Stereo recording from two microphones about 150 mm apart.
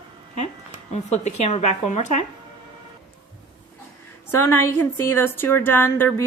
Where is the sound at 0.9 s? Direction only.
45° left (ahead or behind).